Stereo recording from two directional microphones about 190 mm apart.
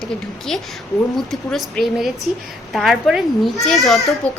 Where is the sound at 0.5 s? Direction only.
Centre (ahead or behind).